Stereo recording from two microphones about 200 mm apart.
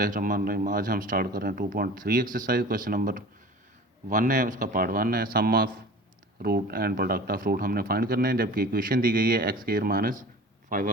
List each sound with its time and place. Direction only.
0.0 s speech: 45° right (ahead or behind)